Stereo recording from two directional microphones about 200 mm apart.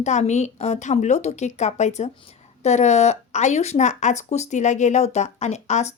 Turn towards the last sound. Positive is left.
turn(degrees=35)  # may be behind; listen again after turning